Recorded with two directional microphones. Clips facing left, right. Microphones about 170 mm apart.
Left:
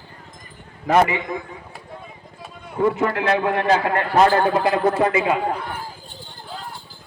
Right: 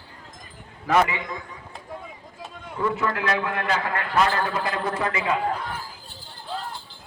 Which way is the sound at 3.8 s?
45° left (ahead or behind).